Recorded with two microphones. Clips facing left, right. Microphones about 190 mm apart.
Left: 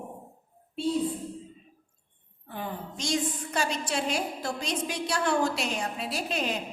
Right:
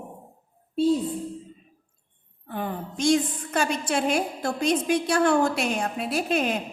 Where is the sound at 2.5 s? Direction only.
55° right (ahead or behind).